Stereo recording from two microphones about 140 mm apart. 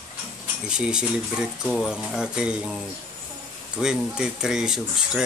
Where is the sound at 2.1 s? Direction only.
5° right (ahead or behind).